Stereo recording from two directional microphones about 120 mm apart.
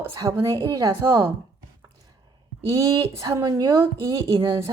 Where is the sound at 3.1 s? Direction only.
25° right (ahead or behind).